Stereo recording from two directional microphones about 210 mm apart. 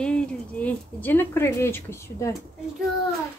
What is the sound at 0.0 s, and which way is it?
Speech, 5° left (ahead or behind).